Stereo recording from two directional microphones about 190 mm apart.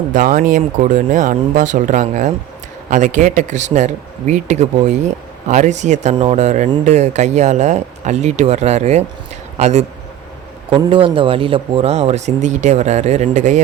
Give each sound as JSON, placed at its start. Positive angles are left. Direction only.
{"t": 0.1, "sound": "speech", "side_deg": -45}